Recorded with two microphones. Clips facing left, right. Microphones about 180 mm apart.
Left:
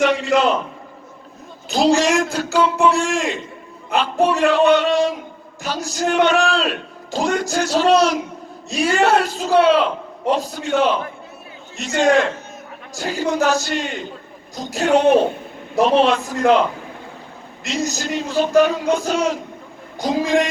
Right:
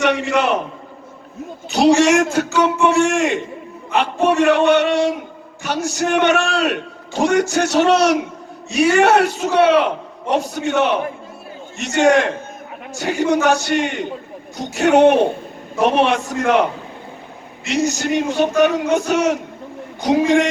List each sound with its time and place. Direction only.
0.0 s a man's voice: 65° right (ahead or behind)
1.7 s a man's voice: 65° right (ahead or behind)
17.7 s a man's voice: 65° right (ahead or behind)